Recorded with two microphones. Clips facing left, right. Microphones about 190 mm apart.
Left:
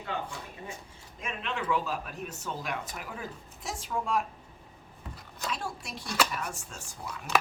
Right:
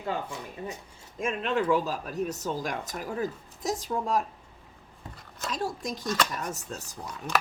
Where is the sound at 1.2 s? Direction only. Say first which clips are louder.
Right 8 dB; 45° right (ahead or behind).